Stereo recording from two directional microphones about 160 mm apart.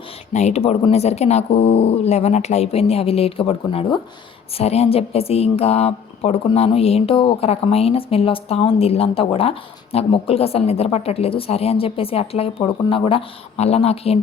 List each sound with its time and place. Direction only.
0.3 s a woman's voice: 45° left (ahead or behind)